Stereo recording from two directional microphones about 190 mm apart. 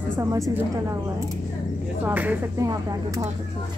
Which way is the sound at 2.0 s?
10° right (ahead or behind).